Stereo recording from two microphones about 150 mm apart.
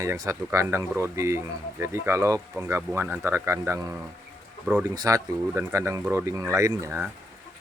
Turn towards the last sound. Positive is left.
turn(degrees=-20)  # may be behind; listen again after turning